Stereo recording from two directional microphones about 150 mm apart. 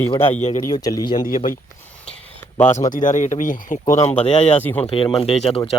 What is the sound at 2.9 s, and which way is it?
Speech, 60° left (ahead or behind).